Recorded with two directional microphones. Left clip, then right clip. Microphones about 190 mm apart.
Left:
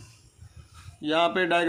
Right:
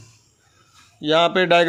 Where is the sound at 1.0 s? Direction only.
45° right (ahead or behind).